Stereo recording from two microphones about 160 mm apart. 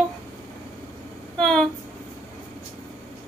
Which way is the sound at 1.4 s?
5° left (ahead or behind).